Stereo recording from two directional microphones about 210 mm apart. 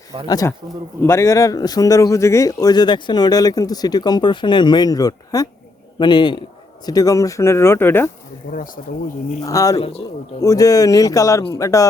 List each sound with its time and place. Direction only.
0.3 s a man's voice: 15° left (ahead or behind)
8.5 s speech: 40° left (ahead or behind)
9.4 s speech: 15° left (ahead or behind)
9.7 s a man's voice: 30° left (ahead or behind)
10.4 s speech: 15° left (ahead or behind)